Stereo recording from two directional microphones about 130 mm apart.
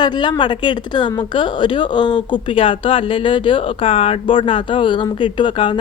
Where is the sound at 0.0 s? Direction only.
35° left (ahead or behind).